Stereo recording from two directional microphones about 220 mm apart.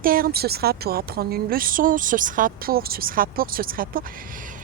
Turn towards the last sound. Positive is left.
turn(degrees=-40)  # may be behind; listen again after turning